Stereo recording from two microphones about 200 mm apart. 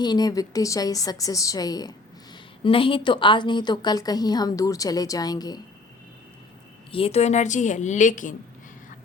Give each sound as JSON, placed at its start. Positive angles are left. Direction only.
{"t": 0.0, "sound": "a woman's voice", "side_deg": 20}
{"t": 6.9, "sound": "a woman's voice", "side_deg": 30}